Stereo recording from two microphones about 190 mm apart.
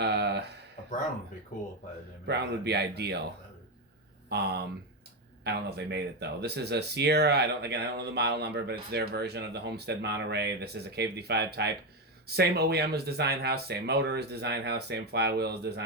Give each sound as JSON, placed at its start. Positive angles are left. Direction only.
{"t": 0.0, "sound": "a sound", "side_deg": -60}
{"t": 2.2, "sound": "speech", "side_deg": -60}
{"t": 4.3, "sound": "speech", "side_deg": -55}